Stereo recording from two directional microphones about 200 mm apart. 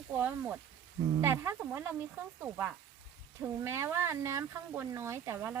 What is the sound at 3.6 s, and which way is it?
Speech, 15° right (ahead or behind).